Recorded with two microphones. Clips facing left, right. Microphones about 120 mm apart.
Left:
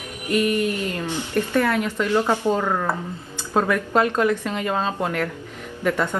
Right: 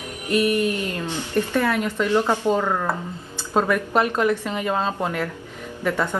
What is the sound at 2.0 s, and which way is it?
Speech, 15° left (ahead or behind).